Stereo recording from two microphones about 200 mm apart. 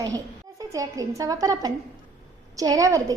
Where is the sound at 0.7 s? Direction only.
15° right (ahead or behind).